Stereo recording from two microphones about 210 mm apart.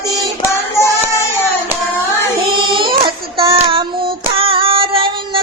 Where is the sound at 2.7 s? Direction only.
25° right (ahead or behind).